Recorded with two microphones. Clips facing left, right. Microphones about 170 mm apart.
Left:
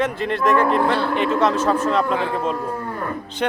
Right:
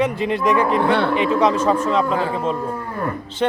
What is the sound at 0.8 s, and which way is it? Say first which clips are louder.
Speech: right 3 dB; 65° right (ahead or behind).